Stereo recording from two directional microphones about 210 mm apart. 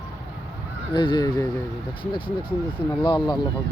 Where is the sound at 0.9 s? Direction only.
20° left (ahead or behind).